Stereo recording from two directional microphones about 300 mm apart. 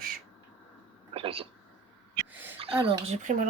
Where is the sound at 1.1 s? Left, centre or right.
Centre.